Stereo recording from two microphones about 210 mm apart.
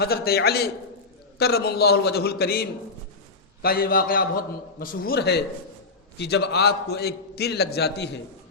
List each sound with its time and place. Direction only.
0.0 s a man's voice: 50° left (ahead or behind)